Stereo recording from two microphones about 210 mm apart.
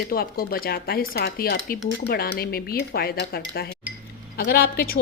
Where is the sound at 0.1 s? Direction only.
45° left (ahead or behind).